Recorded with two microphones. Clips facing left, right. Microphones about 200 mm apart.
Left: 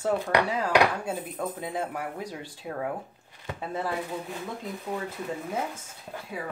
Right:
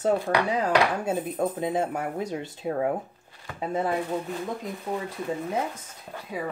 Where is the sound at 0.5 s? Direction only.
20° right (ahead or behind).